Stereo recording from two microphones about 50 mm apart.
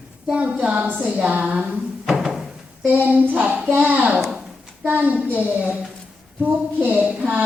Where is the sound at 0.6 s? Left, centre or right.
Right.